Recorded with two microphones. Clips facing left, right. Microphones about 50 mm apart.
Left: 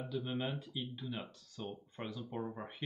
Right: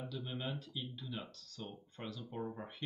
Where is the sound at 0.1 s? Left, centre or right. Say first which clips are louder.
Left 7 dB; left.